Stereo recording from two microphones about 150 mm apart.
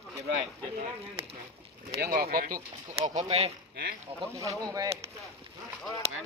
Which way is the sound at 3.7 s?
90° right.